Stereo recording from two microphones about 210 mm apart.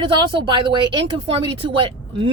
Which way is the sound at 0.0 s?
20° right (ahead or behind).